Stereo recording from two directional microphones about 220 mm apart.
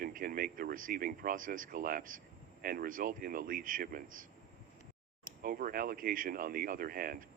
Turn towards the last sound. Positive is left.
turn(degrees=-40)  # may be behind; listen again after turning